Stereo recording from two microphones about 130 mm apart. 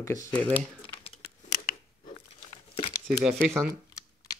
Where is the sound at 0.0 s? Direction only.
20° left (ahead or behind).